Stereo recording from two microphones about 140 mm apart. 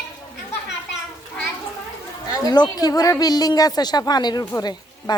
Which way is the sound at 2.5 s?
30° left (ahead or behind).